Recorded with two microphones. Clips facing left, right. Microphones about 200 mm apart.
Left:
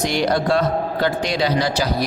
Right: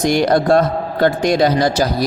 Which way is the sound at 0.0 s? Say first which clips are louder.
Right 5 dB; 50° right (ahead or behind).